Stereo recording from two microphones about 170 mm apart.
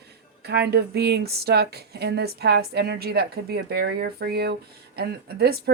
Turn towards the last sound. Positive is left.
turn(degrees=-70)  # may be behind; listen again after turning